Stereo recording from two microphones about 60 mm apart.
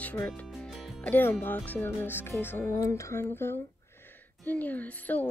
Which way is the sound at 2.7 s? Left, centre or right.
Left.